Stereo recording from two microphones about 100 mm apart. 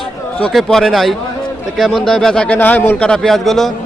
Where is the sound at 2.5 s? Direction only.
20° left (ahead or behind).